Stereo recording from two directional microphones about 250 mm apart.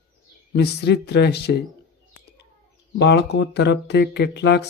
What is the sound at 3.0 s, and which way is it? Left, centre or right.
Speech, left.